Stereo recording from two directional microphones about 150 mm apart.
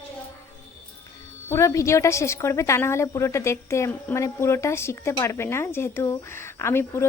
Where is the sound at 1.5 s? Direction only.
20° left (ahead or behind).